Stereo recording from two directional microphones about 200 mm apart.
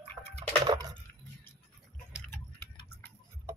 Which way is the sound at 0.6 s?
20° right (ahead or behind).